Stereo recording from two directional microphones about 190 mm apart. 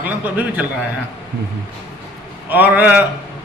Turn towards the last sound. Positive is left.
turn(degrees=-10)  # may be behind; listen again after turning